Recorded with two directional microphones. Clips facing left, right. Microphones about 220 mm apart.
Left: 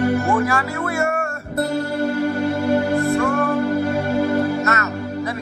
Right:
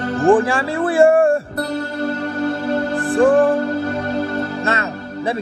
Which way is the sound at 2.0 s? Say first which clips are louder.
Even; 10° left (ahead or behind).